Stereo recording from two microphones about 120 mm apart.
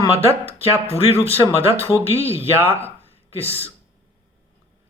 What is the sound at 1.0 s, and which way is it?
Speech, 55° left (ahead or behind).